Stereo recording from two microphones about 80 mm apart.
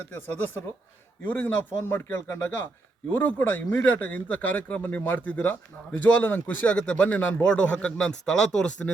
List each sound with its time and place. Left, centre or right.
0.1 s a man's voice: left; by 8.9 s centre